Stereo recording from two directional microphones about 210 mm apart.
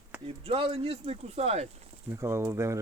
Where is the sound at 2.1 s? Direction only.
15° right (ahead or behind).